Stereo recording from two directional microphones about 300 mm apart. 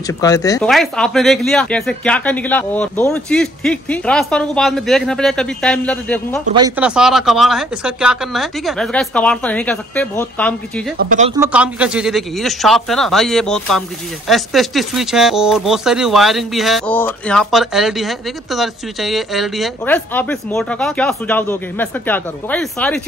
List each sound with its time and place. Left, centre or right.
0.0 s speech: centre
0.7 s speech: centre
6.5 s speech: centre
11.0 s speech: right
11.3 s speech: centre